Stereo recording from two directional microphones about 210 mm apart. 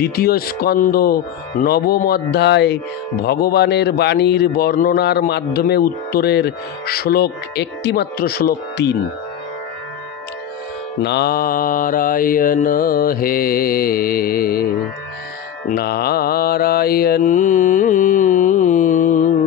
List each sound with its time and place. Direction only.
0.0 s speech: 45° left (ahead or behind)
11.0 s speech: 55° left (ahead or behind)
15.7 s mantra: 50° left (ahead or behind)